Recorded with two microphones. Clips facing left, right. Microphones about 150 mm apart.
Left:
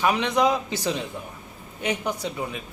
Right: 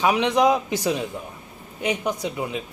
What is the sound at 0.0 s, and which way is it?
A man's voice, 15° right (ahead or behind).